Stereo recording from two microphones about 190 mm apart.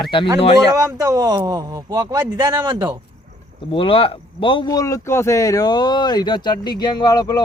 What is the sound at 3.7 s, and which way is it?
Speech, 25° left (ahead or behind).